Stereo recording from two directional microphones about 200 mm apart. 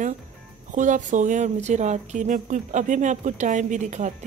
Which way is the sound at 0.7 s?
40° right (ahead or behind).